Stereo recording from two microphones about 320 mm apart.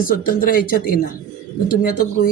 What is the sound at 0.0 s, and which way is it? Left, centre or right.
A woman's voice, left.